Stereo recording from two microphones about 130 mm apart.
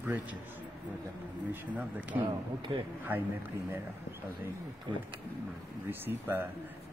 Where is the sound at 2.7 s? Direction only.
45° right (ahead or behind).